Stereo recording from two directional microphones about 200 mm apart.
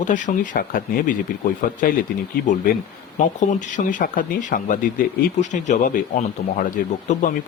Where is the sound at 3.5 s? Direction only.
40° left (ahead or behind).